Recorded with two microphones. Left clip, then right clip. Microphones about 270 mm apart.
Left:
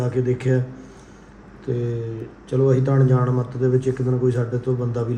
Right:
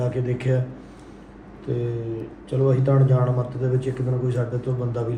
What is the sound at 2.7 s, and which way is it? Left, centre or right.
A man's voice, left.